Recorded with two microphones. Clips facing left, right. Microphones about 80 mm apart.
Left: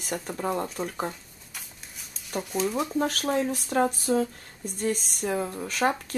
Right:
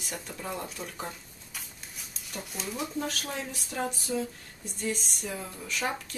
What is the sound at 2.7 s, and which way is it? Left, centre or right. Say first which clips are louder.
Speech: left 7 dB; left.